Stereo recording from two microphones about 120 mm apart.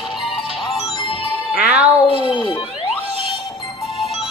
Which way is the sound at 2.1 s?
50° left (ahead or behind).